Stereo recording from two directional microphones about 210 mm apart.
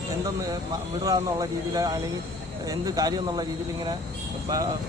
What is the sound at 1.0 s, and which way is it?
Speech, 15° right (ahead or behind).